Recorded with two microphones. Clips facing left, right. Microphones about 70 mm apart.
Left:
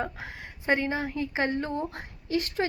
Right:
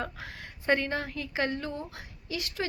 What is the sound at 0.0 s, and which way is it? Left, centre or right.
Speech, left.